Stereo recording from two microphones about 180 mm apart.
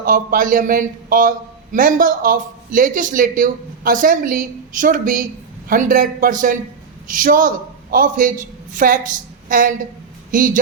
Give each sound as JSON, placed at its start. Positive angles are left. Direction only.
{"t": 0.0, "sound": "a woman's voice", "side_deg": -50}